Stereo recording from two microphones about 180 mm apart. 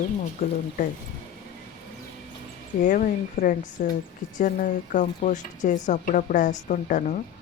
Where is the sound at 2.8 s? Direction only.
50° left (ahead or behind).